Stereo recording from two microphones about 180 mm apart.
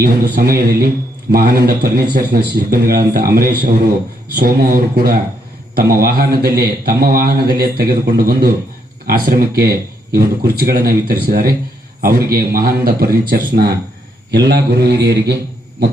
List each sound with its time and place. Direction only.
0.0 s a man's voice: 55° right (ahead or behind)